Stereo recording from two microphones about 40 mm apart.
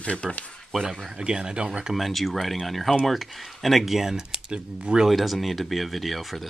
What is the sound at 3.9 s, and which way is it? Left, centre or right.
Speech, centre.